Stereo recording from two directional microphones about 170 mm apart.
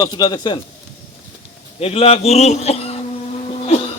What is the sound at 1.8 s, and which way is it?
A man's voice, 35° left (ahead or behind).